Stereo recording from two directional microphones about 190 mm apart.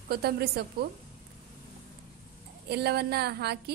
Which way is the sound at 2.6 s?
60° right (ahead or behind).